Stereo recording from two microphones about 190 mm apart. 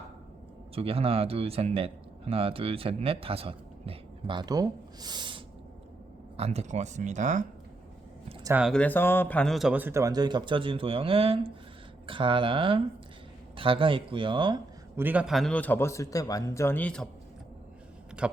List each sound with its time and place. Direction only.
0.8 s speech: 30° right (ahead or behind)
8.6 s a man's voice: 5° left (ahead or behind); by 14.6 s 25° right (ahead or behind)
14.9 s a man's voice: 10° right (ahead or behind)
18.2 s a man's voice: 5° right (ahead or behind)